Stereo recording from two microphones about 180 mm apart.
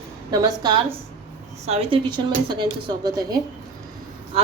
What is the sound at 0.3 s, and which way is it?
Speech, 25° right (ahead or behind).